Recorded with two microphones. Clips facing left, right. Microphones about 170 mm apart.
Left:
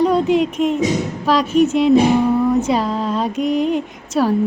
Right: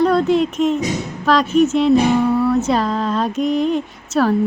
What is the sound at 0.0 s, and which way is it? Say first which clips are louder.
Speech: even; 10° left (ahead or behind).